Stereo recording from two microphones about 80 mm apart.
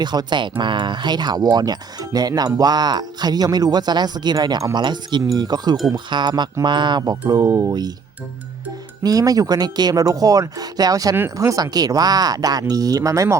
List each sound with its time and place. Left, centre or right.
0.0 s speech: right
5.2 s speech: right
7.0 s speech: right
7.4 s speech: right
7.7 s speech: right
9.0 s speech: right